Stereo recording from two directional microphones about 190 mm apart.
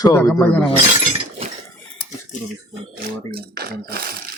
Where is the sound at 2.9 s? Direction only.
55° right (ahead or behind).